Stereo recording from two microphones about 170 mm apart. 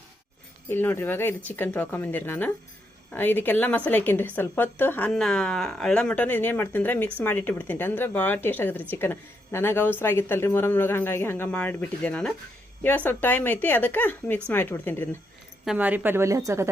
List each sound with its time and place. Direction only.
0.7 s speech: 15° left (ahead or behind)
15.6 s a woman's voice: 5° right (ahead or behind)